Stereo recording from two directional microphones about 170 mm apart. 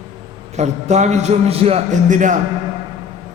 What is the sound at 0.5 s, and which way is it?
A man's voice, 40° right (ahead or behind).